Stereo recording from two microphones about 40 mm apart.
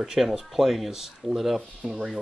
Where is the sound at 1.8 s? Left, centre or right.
Centre.